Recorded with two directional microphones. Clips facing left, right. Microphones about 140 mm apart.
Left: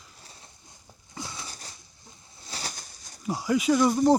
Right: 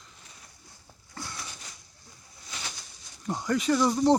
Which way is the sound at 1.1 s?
20° left (ahead or behind).